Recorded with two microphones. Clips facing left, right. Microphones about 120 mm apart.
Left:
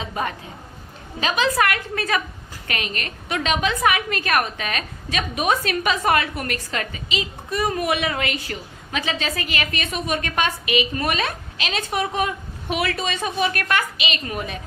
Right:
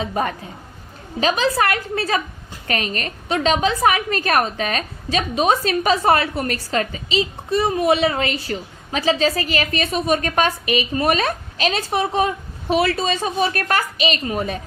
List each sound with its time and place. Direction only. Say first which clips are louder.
0.0 s a woman's voice: right 4 dB; 40° right (ahead or behind)